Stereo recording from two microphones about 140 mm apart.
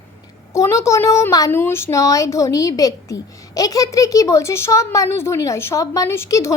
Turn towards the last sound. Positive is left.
turn(degrees=20)  # may be behind; listen again after turning